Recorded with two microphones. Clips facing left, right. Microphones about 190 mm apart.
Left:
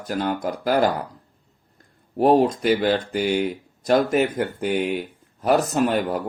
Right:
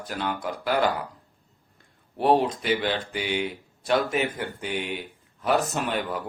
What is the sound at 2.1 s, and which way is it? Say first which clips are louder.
Speech: left 5 dB; 45° left (ahead or behind).